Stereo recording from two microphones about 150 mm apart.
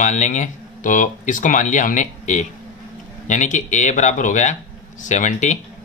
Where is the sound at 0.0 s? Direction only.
55° left (ahead or behind).